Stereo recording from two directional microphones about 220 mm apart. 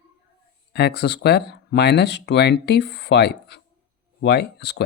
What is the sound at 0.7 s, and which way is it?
Speech, 45° left (ahead or behind).